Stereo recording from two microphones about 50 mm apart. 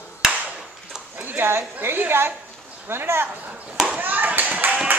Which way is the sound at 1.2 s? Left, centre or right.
Right.